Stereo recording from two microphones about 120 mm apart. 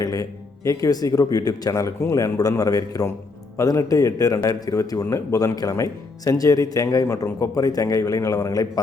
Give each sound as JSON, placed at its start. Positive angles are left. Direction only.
{"t": 0.0, "sound": "speech", "side_deg": 30}